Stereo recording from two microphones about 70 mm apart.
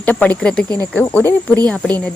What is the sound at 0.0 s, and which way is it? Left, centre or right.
Speech, left.